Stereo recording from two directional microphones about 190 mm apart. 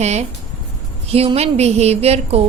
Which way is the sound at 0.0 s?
35° right (ahead or behind).